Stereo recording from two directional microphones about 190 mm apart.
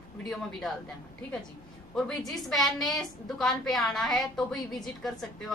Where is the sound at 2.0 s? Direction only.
Centre (ahead or behind).